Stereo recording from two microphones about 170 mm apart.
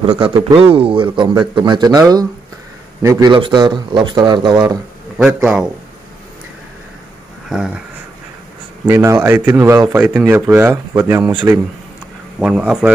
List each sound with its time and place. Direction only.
0.0 s speech: 30° right (ahead or behind)
5.1 s a man's voice: 5° right (ahead or behind)
7.4 s a sound: 5° right (ahead or behind)
8.8 s speech: 15° right (ahead or behind)
12.4 s a man's voice: 5° right (ahead or behind)